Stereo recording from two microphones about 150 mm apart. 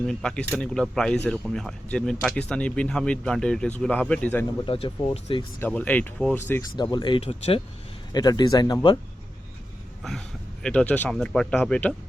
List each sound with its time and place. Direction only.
0.0 s speech: 5° left (ahead or behind)
4.6 s speech: 40° left (ahead or behind)
5.5 s speech: 10° left (ahead or behind)
6.9 s speech: 35° left (ahead or behind)
8.1 s speech: 25° left (ahead or behind)
10.0 s speech: centre (ahead or behind)